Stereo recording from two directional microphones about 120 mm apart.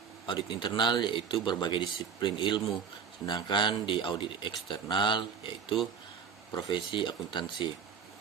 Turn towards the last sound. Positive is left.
turn(degrees=40)  # may be behind; listen again after turning